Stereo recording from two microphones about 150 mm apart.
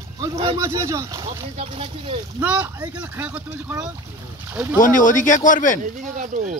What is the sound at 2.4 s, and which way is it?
Speech, 10° right (ahead or behind).